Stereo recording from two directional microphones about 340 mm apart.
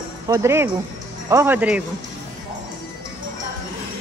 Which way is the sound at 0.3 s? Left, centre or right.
Centre.